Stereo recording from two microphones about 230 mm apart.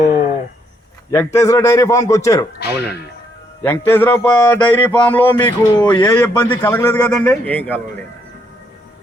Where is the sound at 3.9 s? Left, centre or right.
Centre.